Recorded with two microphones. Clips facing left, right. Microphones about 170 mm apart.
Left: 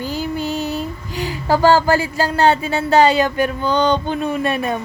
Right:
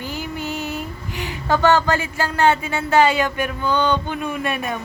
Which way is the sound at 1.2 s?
30° left (ahead or behind).